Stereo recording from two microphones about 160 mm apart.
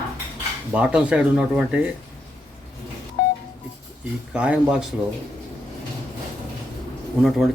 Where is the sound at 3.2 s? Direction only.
75° left (ahead or behind).